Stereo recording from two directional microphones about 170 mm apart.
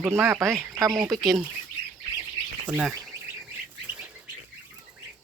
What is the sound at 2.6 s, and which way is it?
Speech, 10° right (ahead or behind).